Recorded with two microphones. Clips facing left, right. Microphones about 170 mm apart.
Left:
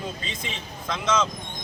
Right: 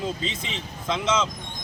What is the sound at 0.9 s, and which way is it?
Speech, 25° right (ahead or behind).